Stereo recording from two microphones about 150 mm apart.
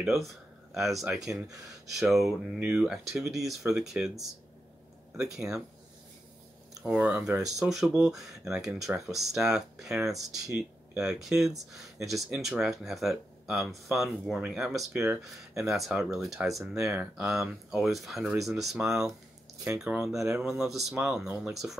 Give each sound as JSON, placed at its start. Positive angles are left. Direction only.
{"t": 0.0, "sound": "speech", "side_deg": 0}
{"t": 6.9, "sound": "speech", "side_deg": -5}
{"t": 19.6, "sound": "speech", "side_deg": -15}
{"t": 20.0, "sound": "speech", "side_deg": -5}